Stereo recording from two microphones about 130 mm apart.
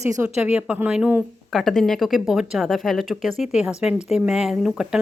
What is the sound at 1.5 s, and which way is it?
A woman's voice, centre (ahead or behind).